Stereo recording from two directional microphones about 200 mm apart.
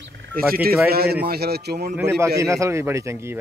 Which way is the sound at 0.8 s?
50° right (ahead or behind).